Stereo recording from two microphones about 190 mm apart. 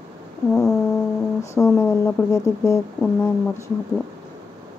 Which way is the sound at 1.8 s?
15° left (ahead or behind).